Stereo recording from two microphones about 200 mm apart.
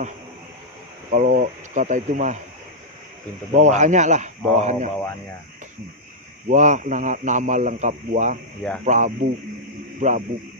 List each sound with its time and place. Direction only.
1.1 s a man's voice: 40° right (ahead or behind)
3.5 s a man's voice: 35° right (ahead or behind)
6.5 s a man's voice: 40° right (ahead or behind)